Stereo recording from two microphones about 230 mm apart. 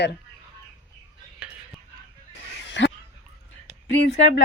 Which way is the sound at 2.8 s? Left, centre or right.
Left.